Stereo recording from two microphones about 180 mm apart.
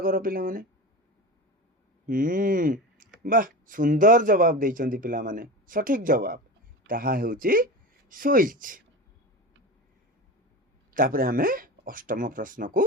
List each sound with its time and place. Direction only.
0.0 s speech: 50° right (ahead or behind)
2.0 s speech: 50° right (ahead or behind)
10.9 s speech: 50° right (ahead or behind)